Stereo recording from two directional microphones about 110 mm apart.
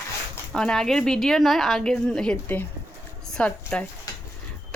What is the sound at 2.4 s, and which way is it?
Speech, 20° left (ahead or behind).